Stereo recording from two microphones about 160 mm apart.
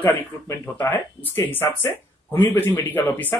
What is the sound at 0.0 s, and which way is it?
Speech, 10° left (ahead or behind).